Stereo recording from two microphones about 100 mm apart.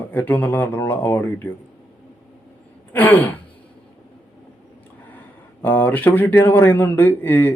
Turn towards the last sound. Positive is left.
turn(degrees=20)  # may be behind; listen again after turning